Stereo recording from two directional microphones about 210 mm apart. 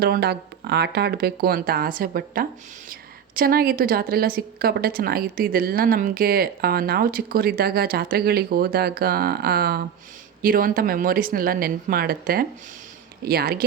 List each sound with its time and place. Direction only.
0.0 s a woman's voice: 50° right (ahead or behind)